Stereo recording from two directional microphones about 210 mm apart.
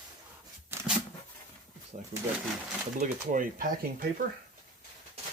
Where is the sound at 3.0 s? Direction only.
40° right (ahead or behind).